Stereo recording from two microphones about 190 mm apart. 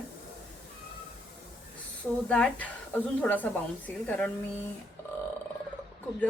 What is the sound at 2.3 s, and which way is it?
A woman's voice, 5° left (ahead or behind).